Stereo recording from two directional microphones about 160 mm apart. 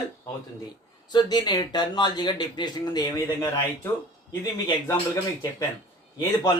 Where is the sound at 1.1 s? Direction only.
25° left (ahead or behind).